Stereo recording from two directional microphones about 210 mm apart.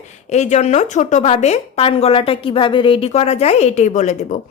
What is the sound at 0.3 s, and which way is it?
A woman's voice, 35° left (ahead or behind).